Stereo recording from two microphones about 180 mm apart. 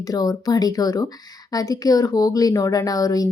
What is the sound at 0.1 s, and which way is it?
Speech, 20° left (ahead or behind).